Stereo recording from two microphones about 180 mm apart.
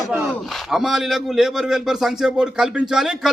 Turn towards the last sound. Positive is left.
turn(degrees=-5)  # may be behind; listen again after turning